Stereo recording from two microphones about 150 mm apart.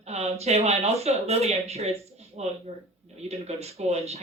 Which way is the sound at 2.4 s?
50° right (ahead or behind).